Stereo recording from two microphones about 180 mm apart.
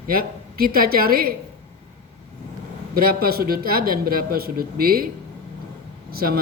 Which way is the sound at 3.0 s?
55° right (ahead or behind).